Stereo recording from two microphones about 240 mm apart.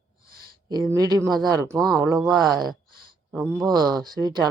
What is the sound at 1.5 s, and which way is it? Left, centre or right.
Speech, centre.